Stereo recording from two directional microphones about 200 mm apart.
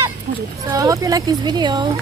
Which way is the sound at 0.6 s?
15° right (ahead or behind).